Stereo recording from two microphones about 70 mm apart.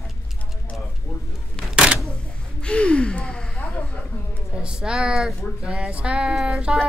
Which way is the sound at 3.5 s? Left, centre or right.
Centre.